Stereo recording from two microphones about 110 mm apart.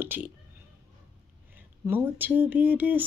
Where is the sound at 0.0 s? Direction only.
20° right (ahead or behind).